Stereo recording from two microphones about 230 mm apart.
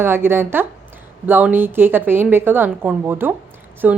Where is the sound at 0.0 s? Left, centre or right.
Centre.